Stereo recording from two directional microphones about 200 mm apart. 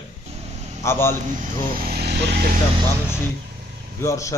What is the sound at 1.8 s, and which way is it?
Speech, 50° right (ahead or behind).